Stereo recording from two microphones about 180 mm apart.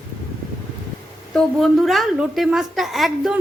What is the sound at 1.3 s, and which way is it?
A woman's voice, centre (ahead or behind).